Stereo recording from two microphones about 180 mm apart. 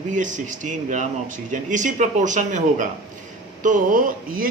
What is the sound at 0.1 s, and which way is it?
Speech, 45° right (ahead or behind).